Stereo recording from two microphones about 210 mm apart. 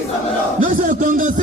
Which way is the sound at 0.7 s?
40° right (ahead or behind).